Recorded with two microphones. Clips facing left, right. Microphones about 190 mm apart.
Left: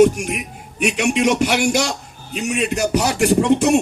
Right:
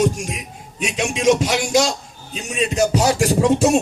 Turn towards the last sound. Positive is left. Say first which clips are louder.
# left 1 dB
turn(degrees=65)  # may be behind; listen again after turning